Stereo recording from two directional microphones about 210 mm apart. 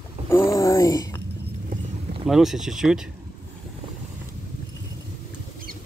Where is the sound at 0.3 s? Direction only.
15° left (ahead or behind).